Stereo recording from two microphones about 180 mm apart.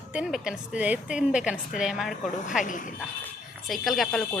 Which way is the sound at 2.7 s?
45° left (ahead or behind).